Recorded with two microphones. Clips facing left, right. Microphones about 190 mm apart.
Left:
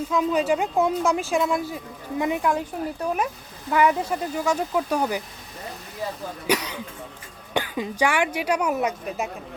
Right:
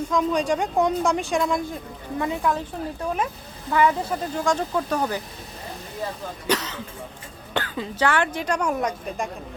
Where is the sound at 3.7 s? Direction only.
10° left (ahead or behind).